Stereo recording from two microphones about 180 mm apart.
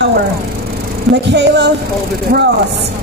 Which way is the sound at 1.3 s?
70° right (ahead or behind).